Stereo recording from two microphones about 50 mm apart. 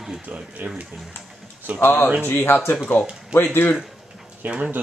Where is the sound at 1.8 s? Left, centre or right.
Left.